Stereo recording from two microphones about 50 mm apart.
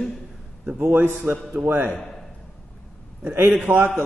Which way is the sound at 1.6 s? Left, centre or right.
Centre.